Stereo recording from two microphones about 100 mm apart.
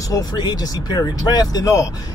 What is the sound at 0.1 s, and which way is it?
Speech, 40° left (ahead or behind).